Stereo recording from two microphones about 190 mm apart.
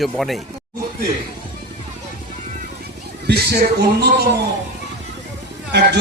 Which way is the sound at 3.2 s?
55° right (ahead or behind).